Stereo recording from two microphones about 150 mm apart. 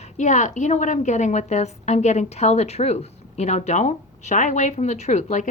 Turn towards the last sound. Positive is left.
turn(degrees=55)  # may be behind; listen again after turning